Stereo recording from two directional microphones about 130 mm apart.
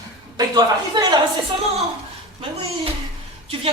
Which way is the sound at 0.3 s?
30° right (ahead or behind).